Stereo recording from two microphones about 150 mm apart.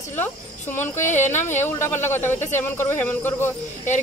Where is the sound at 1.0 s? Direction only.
55° left (ahead or behind).